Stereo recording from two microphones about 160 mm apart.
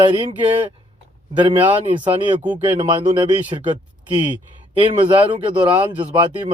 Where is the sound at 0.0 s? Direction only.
30° right (ahead or behind).